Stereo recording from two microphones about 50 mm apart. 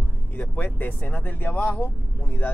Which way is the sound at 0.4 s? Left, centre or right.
Left.